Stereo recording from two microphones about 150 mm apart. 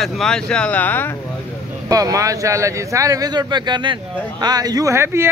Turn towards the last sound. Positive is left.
turn(degrees=-15)  # may be behind; listen again after turning